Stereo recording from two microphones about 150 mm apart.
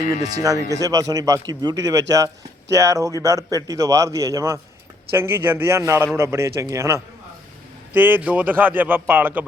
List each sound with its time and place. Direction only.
0.1 s a man's voice: 25° right (ahead or behind)